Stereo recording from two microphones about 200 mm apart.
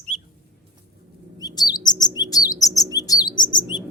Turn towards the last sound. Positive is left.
turn(degrees=20)  # may be behind; listen again after turning